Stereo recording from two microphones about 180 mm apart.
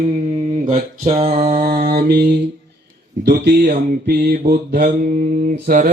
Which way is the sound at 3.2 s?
65° right (ahead or behind).